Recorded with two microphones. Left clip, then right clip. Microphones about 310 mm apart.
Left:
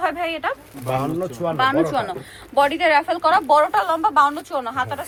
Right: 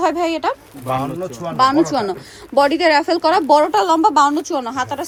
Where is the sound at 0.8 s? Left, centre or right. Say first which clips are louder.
Right 2 dB; centre.